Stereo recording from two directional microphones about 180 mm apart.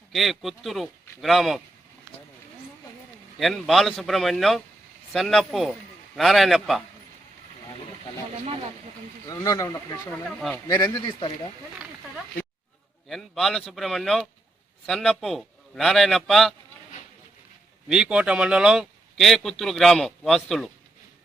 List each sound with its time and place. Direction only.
0.1 s a man's voice: centre (ahead or behind)
3.3 s a man's voice: centre (ahead or behind)
9.2 s speech: 20° left (ahead or behind)
10.2 s a man's voice: centre (ahead or behind)
10.7 s speech: 25° left (ahead or behind)
13.1 s a man's voice: centre (ahead or behind)
17.8 s a man's voice: 5° right (ahead or behind)